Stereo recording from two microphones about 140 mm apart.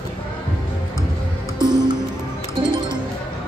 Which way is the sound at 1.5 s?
30° right (ahead or behind).